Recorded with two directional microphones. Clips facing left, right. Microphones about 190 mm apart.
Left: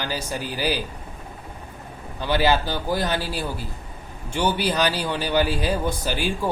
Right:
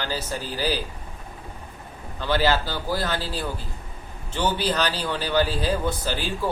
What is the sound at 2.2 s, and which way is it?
A man's voice, 15° left (ahead or behind).